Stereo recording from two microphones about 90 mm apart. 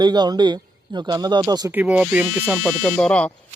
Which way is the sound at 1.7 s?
15° right (ahead or behind).